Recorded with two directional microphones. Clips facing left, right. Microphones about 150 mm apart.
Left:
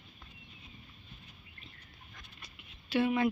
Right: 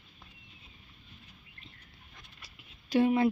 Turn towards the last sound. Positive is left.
turn(degrees=-35)  # may be behind; listen again after turning